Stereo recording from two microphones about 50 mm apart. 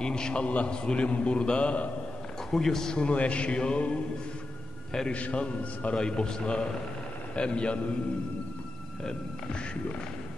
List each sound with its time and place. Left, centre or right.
0.0 s a man's voice: centre
2.5 s a man's voice: centre
5.1 s a man's voice: left
5.9 s a man's voice: centre